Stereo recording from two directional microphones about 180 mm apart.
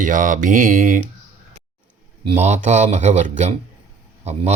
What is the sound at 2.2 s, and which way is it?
Speech, 40° right (ahead or behind).